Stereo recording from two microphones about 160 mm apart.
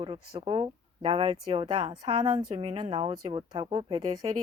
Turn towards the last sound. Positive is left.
turn(degrees=-40)  # may be behind; listen again after turning